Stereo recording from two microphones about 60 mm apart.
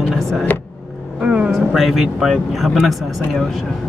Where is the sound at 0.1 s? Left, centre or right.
Centre.